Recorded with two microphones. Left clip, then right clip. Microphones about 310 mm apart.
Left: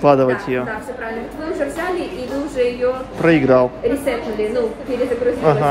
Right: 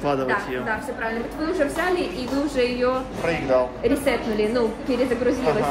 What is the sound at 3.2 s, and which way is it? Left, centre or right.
Speech, left.